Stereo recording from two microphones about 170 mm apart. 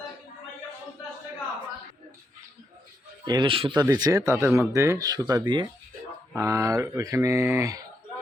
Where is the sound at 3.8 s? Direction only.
20° right (ahead or behind).